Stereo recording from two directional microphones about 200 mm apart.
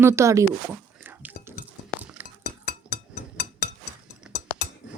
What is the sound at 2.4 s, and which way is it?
Chink, 55° left (ahead or behind).